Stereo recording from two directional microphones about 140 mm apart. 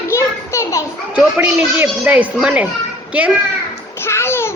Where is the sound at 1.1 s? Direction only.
10° right (ahead or behind).